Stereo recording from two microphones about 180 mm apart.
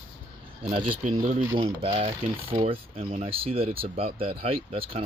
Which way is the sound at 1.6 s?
30° right (ahead or behind).